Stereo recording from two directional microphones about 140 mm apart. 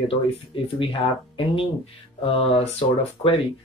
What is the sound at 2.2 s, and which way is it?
Speech, 40° left (ahead or behind).